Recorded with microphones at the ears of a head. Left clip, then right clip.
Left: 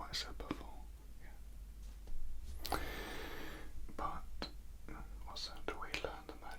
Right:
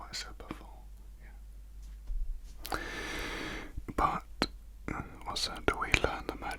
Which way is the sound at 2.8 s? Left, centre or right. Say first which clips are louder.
Right 8 dB; right.